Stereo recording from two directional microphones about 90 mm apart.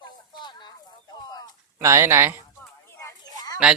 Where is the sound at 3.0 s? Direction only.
40° left (ahead or behind).